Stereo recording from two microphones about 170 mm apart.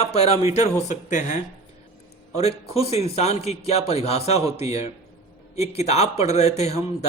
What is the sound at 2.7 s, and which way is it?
A man's voice, 35° left (ahead or behind).